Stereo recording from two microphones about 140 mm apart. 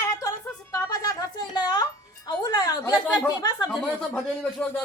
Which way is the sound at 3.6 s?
Centre (ahead or behind).